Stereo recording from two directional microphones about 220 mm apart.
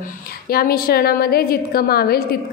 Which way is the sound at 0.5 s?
45° left (ahead or behind).